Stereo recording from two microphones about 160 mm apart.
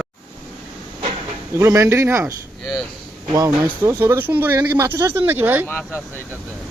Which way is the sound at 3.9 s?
15° right (ahead or behind).